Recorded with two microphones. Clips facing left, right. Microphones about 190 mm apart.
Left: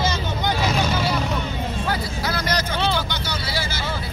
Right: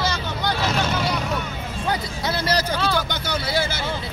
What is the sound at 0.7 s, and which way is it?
Vehicle, 10° left (ahead or behind).